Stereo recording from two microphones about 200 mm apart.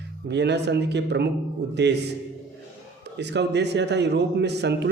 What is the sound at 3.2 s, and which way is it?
Speech, 60° right (ahead or behind).